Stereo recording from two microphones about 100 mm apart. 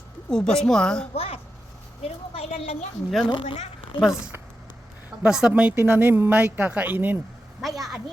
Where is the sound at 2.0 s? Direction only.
90° left.